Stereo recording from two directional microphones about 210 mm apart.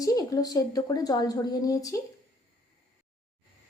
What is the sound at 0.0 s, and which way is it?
A woman's voice, 15° left (ahead or behind).